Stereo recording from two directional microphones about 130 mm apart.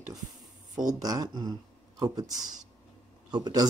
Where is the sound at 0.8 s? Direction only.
30° right (ahead or behind).